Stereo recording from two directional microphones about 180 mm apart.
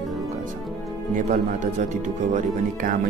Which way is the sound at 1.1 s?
45° right (ahead or behind).